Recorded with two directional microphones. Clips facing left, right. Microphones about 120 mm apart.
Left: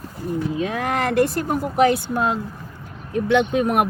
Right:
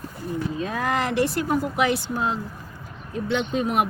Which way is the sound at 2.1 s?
65° left (ahead or behind).